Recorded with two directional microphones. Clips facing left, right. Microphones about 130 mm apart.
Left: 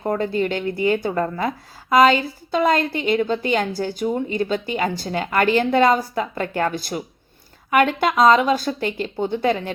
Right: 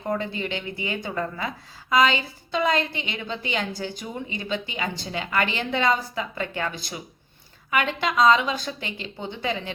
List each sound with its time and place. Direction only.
0.0 s speech: 35° left (ahead or behind)
0.3 s a woman's voice: 45° left (ahead or behind)